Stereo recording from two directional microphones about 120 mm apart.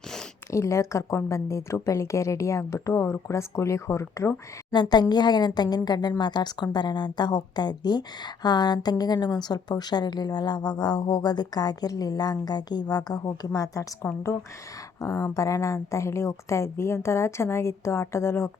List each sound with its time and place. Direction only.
0.5 s a woman's voice: 25° left (ahead or behind)
4.7 s a woman's voice: 35° left (ahead or behind)